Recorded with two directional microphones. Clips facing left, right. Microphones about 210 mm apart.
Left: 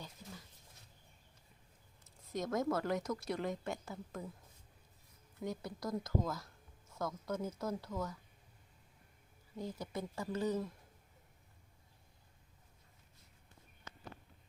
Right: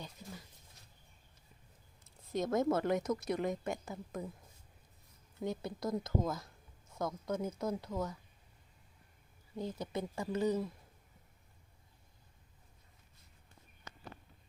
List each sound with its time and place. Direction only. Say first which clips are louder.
2.0 s speech: right 4 dB; 25° right (ahead or behind)
5.4 s speech: right 3 dB; 25° right (ahead or behind)
9.6 s speech: right 3 dB; 20° right (ahead or behind)